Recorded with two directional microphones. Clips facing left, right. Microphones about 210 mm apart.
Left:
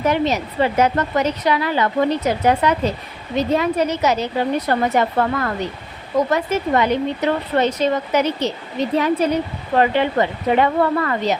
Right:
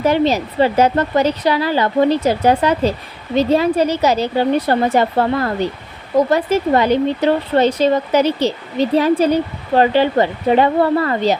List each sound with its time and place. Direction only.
0.0 s speech: 30° right (ahead or behind)